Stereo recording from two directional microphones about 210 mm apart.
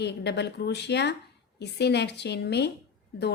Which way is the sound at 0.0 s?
55° left (ahead or behind).